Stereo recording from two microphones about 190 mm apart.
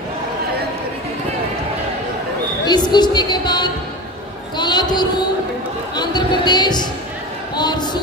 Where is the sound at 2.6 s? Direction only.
20° left (ahead or behind).